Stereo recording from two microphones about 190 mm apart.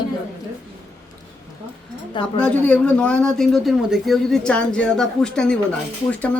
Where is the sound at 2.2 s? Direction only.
25° left (ahead or behind).